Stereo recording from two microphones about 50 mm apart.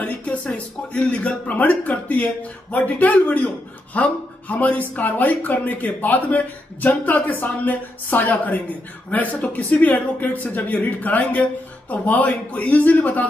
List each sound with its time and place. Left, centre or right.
0.0 s a man's voice: left